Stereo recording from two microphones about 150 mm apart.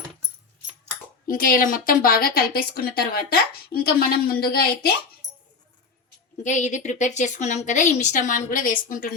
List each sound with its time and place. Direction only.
1.3 s a woman's voice: 70° left (ahead or behind); by 4.9 s 90° left
6.4 s a woman's voice: 55° left (ahead or behind)